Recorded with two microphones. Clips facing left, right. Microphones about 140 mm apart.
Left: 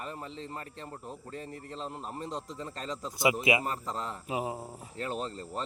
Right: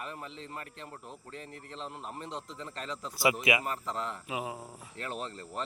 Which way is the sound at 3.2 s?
25° left (ahead or behind).